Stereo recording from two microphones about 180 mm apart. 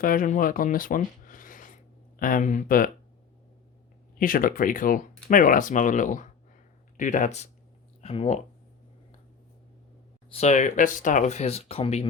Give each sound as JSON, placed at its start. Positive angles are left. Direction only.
{"t": 0.0, "sound": "speech", "side_deg": 50}
{"t": 4.2, "sound": "speech", "side_deg": 50}
{"t": 10.2, "sound": "speech", "side_deg": 35}